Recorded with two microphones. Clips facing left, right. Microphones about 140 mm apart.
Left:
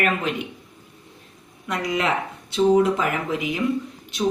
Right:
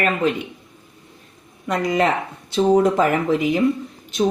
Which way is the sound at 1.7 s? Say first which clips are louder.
Right 5 dB; 40° right (ahead or behind).